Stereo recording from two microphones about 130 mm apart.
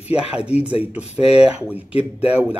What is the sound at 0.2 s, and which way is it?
Speech, 50° left (ahead or behind).